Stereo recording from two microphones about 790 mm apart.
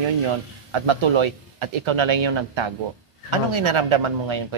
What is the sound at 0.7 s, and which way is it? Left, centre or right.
Speech, right.